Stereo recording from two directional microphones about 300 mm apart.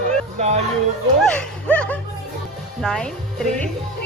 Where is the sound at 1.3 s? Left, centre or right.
Centre.